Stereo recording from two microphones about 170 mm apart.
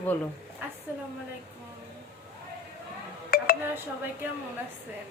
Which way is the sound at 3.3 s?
60° left (ahead or behind).